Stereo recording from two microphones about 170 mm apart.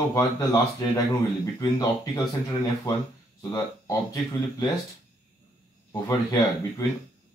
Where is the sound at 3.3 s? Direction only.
20° left (ahead or behind).